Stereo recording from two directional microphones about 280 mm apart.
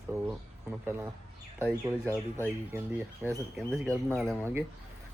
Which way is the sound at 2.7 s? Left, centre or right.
Centre.